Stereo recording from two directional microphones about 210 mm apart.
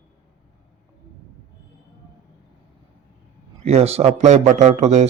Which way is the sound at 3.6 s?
30° right (ahead or behind).